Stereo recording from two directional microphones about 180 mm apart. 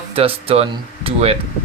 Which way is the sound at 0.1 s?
30° right (ahead or behind).